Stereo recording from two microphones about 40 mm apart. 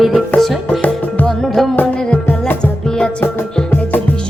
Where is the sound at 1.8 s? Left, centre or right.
Left.